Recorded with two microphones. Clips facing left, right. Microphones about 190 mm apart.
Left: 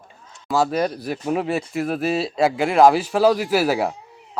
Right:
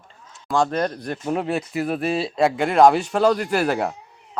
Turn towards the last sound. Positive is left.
turn(degrees=5)  # may be behind; listen again after turning